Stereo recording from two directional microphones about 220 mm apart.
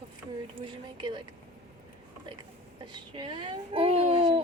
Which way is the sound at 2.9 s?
20° right (ahead or behind).